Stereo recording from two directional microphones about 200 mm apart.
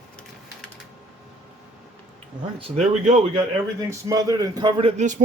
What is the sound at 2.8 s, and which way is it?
Speech, 35° right (ahead or behind).